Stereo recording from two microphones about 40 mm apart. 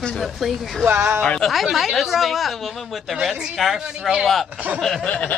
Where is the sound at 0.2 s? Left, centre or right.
Centre.